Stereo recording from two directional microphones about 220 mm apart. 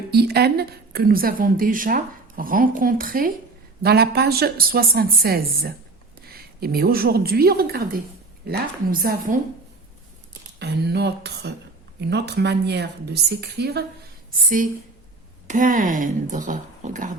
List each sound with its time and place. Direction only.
0.1 s a woman's voice: 45° right (ahead or behind)
10.6 s a woman's voice: 50° right (ahead or behind)
15.4 s a woman's voice: 35° right (ahead or behind)